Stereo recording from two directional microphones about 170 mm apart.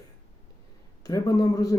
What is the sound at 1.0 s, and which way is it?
Speech, 20° left (ahead or behind).